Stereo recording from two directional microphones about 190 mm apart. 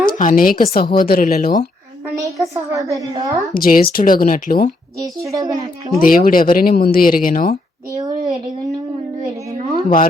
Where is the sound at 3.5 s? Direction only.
50° left (ahead or behind).